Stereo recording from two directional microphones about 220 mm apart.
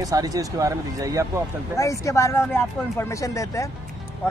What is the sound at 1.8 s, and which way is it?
Speech, 15° left (ahead or behind).